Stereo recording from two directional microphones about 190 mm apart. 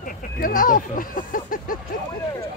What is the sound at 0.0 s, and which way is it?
Speech, 45° left (ahead or behind).